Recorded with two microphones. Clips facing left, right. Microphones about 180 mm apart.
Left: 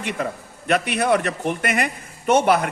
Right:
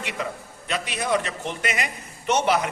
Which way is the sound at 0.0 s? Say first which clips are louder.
Left 4 dB; 50° left (ahead or behind).